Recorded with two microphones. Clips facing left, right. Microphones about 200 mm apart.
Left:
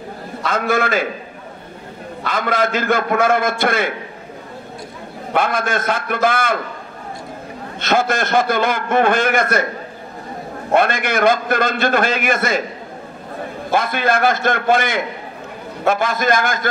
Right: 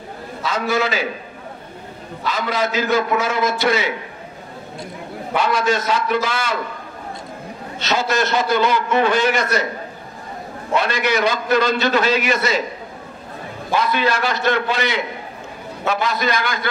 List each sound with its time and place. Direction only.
0.4 s a man's voice: 55° left (ahead or behind)
2.2 s a man's voice: 50° left (ahead or behind)
5.3 s a man's voice: 55° left (ahead or behind)
7.8 s a man's voice: 55° left (ahead or behind)
10.7 s a man's voice: 50° left (ahead or behind)
13.7 s a man's voice: 50° left (ahead or behind)